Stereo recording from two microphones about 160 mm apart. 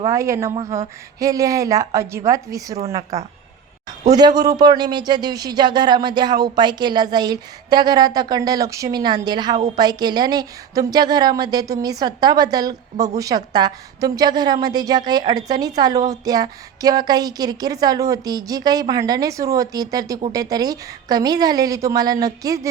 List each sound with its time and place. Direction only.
0.0 s a woman's voice: 20° right (ahead or behind)